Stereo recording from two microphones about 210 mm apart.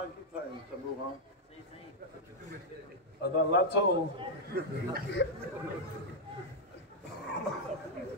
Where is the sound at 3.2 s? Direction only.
55° left (ahead or behind).